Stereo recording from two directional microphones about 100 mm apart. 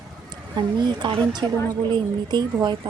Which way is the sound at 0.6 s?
50° right (ahead or behind).